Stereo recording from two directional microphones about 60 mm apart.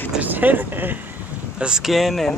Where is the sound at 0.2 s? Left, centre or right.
Right.